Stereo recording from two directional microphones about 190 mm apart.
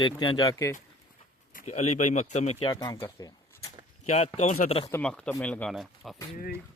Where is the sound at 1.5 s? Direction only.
35° left (ahead or behind).